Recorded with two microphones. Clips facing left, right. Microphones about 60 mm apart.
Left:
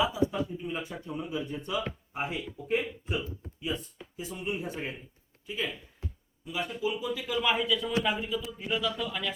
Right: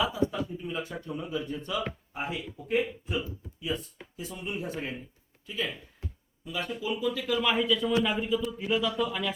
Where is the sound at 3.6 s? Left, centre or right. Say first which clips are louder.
Right 1 dB; left.